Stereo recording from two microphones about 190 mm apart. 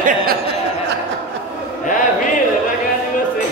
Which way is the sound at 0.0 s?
50° right (ahead or behind).